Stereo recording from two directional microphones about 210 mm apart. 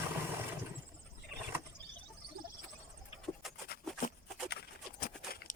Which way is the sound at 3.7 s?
50° left (ahead or behind).